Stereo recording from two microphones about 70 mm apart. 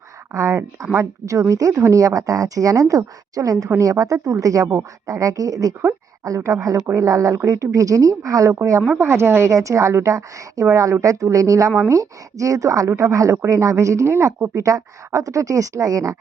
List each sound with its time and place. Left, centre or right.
0.3 s a woman's voice: right
9.0 s a woman's voice: right